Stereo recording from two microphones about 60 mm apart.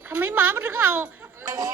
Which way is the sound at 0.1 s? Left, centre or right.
Right.